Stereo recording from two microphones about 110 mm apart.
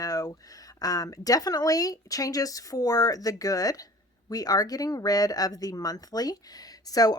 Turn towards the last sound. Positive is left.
turn(degrees=35)  # may be behind; listen again after turning